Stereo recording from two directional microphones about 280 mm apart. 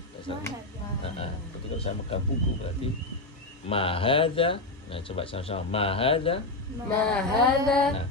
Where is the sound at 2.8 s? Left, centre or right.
Centre.